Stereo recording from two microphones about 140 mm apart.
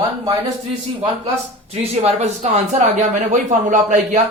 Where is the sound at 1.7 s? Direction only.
50° right (ahead or behind).